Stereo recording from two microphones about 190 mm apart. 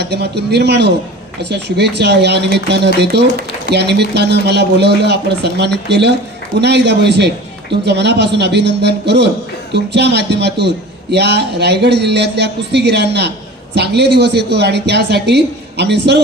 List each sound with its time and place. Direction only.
0.0 s a man's voice: 60° right (ahead or behind)